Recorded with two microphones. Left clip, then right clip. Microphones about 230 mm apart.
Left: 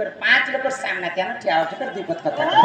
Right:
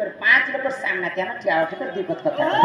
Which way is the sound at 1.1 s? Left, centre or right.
Left.